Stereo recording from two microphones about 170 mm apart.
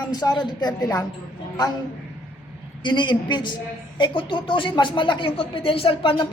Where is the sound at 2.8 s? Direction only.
25° left (ahead or behind).